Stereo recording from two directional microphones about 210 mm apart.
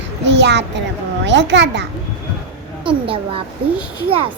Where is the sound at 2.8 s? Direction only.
25° right (ahead or behind).